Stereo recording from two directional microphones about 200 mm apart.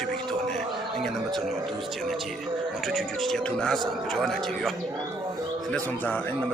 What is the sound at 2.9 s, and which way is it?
A man's voice, centre (ahead or behind).